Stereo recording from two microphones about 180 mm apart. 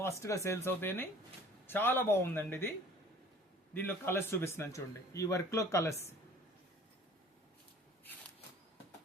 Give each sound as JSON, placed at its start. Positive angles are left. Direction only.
{"t": 0.0, "sound": "speech", "side_deg": 15}
{"t": 3.8, "sound": "speech", "side_deg": 10}